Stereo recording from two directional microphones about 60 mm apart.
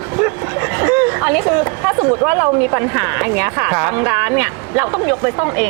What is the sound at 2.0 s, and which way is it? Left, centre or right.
Speech, right.